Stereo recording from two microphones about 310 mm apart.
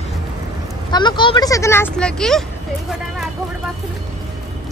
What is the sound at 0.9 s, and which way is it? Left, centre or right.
Speech, centre.